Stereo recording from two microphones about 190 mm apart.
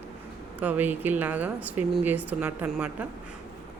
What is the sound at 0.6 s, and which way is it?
Speech, 10° right (ahead or behind).